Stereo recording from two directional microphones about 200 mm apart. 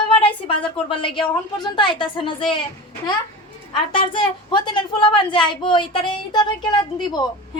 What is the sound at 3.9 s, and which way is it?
A woman's voice, 25° left (ahead or behind).